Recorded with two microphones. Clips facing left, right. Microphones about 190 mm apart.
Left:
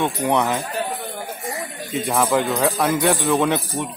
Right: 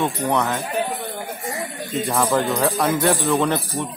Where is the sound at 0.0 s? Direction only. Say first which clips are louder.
Left 1 dB; 15° left (ahead or behind).